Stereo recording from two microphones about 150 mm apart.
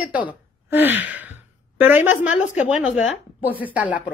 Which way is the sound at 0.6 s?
15° right (ahead or behind).